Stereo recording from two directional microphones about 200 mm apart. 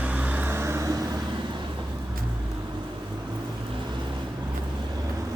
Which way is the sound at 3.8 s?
25° right (ahead or behind).